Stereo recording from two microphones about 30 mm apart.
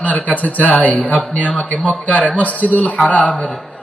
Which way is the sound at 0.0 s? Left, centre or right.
Left.